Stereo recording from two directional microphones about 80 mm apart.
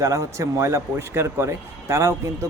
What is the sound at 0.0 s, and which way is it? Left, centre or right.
A man's voice, right.